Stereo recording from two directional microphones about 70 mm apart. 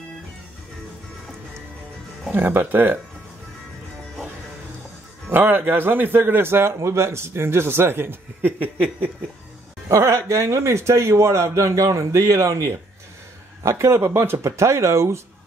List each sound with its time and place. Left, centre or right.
2.3 s speech: right
5.3 s a man's voice: right
9.8 s speech: right
13.7 s a man's voice: right